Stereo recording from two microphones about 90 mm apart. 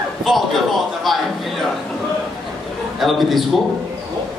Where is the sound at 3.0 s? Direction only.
Centre (ahead or behind).